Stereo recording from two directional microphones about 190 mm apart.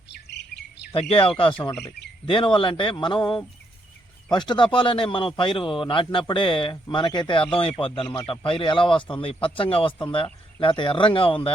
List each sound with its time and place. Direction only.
0.1 s chirp: 60° left (ahead or behind)
0.9 s speech: 30° left (ahead or behind)